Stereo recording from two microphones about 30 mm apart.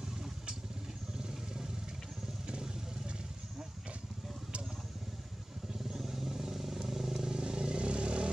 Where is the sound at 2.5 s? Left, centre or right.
Right.